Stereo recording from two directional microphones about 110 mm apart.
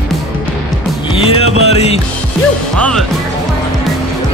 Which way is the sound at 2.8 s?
10° left (ahead or behind).